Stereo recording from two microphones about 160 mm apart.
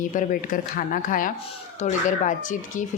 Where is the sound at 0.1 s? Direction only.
55° left (ahead or behind).